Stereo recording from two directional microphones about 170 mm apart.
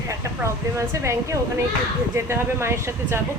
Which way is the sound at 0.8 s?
15° right (ahead or behind).